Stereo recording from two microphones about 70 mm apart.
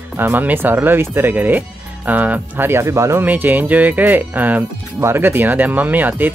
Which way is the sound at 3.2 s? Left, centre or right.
Right.